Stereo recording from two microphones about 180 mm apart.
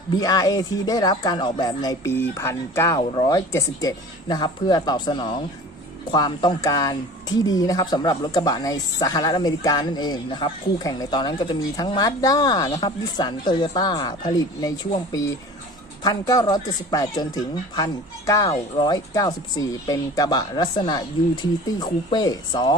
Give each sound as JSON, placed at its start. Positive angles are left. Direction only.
{"t": 0.2, "sound": "speech", "side_deg": 20}
{"t": 16.0, "sound": "speech", "side_deg": 20}